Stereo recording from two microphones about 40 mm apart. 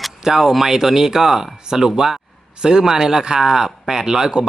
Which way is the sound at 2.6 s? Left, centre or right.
Centre.